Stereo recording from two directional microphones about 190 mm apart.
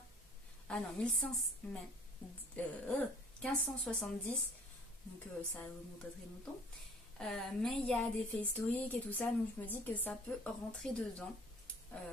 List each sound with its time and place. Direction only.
0.7 s a woman's voice: 5° left (ahead or behind)
7.2 s a woman's voice: centre (ahead or behind)